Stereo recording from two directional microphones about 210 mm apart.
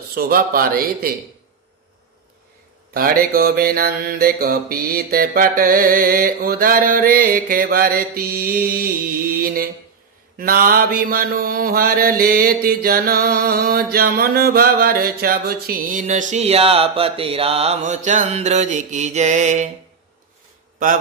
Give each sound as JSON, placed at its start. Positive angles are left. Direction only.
{"t": 0.1, "sound": "mantra", "side_deg": -45}
{"t": 2.9, "sound": "mantra", "side_deg": -45}
{"t": 10.3, "sound": "mantra", "side_deg": -45}